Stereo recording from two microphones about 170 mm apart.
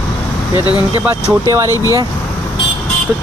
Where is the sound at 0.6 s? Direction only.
25° left (ahead or behind).